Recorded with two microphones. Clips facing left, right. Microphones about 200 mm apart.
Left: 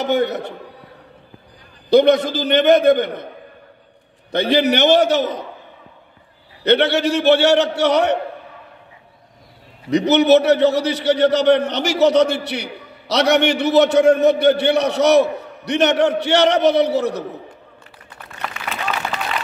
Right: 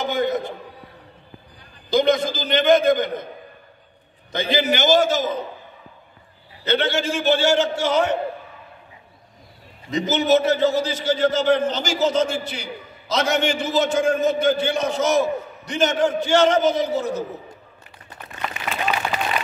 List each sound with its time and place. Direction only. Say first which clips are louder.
0.0 s a man's voice: left 3 dB; 70° left (ahead or behind)
1.9 s a man's voice: left 6 dB; 65° left (ahead or behind)
4.3 s a man's voice: left 5 dB; 65° left (ahead or behind)
6.6 s a man's voice: left 6 dB; 65° left (ahead or behind)
9.8 s a man's voice: left 6 dB; 70° left (ahead or behind)
18.5 s a sound: right 1 dB; 15° right (ahead or behind)